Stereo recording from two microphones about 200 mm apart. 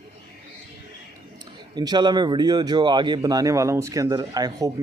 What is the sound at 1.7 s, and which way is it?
Speech, 20° right (ahead or behind).